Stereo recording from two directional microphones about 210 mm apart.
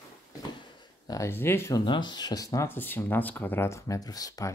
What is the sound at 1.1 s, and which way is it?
Speech, 10° left (ahead or behind).